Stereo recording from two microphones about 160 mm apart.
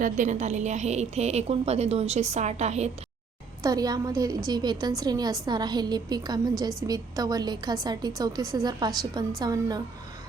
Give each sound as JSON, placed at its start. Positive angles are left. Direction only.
{"t": 0.0, "sound": "a woman's voice", "side_deg": -50}
{"t": 3.6, "sound": "a woman's voice", "side_deg": -25}